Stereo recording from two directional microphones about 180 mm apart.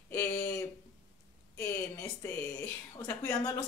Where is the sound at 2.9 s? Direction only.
15° left (ahead or behind).